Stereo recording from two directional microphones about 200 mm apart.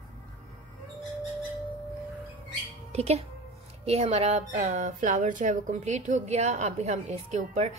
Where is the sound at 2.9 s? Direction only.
30° right (ahead or behind).